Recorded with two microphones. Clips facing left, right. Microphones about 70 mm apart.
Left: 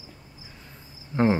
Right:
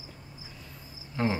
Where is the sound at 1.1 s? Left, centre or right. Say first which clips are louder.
Left 7 dB; left.